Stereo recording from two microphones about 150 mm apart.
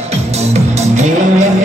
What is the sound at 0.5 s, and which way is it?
Music, 50° right (ahead or behind).